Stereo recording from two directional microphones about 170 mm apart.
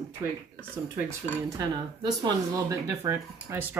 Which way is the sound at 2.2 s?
20° right (ahead or behind).